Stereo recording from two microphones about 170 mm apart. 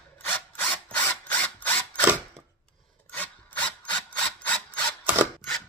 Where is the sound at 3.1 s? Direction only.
10° left (ahead or behind).